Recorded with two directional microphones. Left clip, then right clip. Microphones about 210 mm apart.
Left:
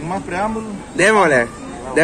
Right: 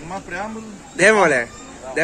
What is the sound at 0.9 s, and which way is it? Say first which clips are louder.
Speech: left 1 dB; centre (ahead or behind).